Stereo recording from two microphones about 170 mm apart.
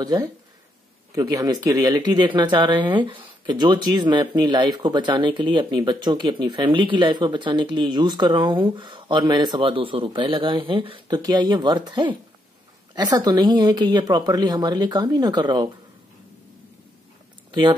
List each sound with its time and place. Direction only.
1.1 s speech: 20° right (ahead or behind)
17.5 s speech: 30° right (ahead or behind)